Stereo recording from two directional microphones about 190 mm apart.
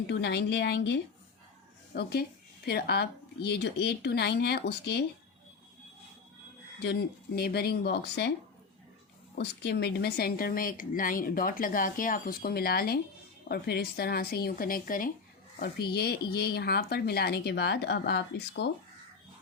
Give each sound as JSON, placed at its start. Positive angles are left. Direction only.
{"t": 0.1, "sound": "speech", "side_deg": 60}
{"t": 7.3, "sound": "speech", "side_deg": 55}
{"t": 9.3, "sound": "speech", "side_deg": 60}